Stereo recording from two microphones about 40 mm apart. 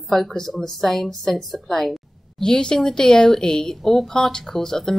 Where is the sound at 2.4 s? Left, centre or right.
Centre.